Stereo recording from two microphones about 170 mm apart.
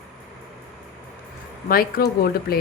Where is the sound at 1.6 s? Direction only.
60° left (ahead or behind).